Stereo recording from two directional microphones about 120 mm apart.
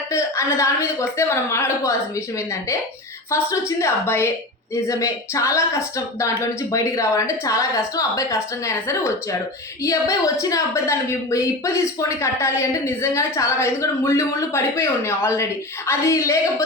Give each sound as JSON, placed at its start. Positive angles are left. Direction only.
{"t": 0.1, "sound": "a woman's voice", "side_deg": 25}
{"t": 3.3, "sound": "a woman's voice", "side_deg": 25}